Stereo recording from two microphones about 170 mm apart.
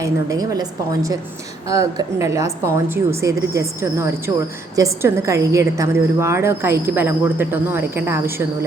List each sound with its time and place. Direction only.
0.0 s a woman's voice: 20° right (ahead or behind)